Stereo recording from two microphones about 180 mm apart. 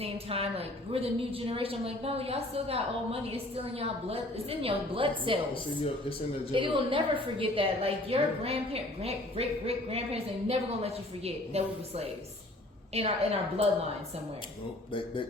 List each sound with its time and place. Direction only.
0.0 s a woman's voice: 35° right (ahead or behind)
6.5 s a woman's voice: 30° right (ahead or behind)